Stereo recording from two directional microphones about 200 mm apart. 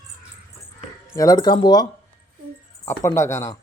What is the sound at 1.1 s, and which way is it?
Child singing, 20° left (ahead or behind).